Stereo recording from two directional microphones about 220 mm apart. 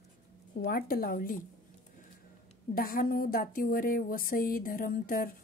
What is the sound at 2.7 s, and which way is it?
A woman's voice, 40° left (ahead or behind).